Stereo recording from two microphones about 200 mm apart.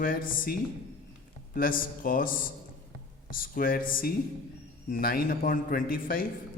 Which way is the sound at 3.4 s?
45° left (ahead or behind).